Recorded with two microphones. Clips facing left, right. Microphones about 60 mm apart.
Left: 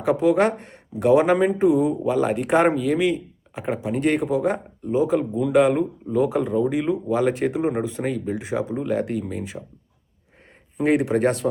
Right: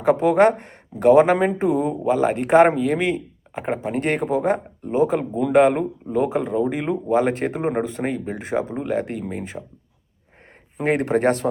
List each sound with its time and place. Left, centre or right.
0.0 s speech: right
6.6 s speech: right
8.8 s speech: right
10.8 s speech: right
11.1 s speech: right